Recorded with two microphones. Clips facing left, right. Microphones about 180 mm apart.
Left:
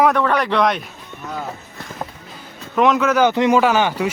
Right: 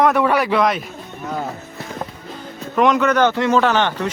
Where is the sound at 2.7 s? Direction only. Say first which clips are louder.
Even; centre (ahead or behind).